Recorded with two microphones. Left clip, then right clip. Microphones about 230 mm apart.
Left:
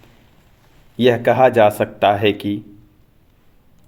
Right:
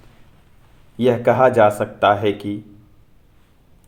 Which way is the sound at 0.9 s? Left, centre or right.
Left.